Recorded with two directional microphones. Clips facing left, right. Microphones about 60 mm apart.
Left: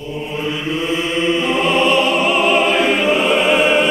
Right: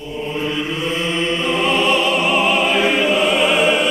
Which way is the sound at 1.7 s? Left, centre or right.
Left.